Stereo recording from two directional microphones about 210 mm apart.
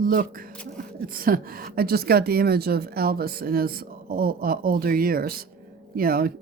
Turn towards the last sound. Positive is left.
turn(degrees=-45)  # may be behind; listen again after turning